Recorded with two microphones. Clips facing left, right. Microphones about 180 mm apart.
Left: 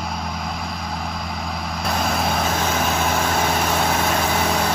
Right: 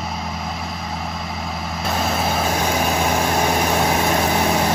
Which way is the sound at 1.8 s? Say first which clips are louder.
Right 1 dB; centre (ahead or behind).